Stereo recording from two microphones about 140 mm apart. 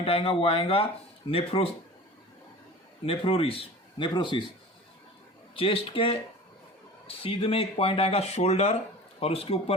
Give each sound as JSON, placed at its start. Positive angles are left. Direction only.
{"t": 0.0, "sound": "speech", "side_deg": 40}
{"t": 3.1, "sound": "speech", "side_deg": 40}
{"t": 5.5, "sound": "speech", "side_deg": 40}